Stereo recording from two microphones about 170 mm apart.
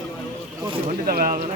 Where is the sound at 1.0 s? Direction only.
60° right (ahead or behind).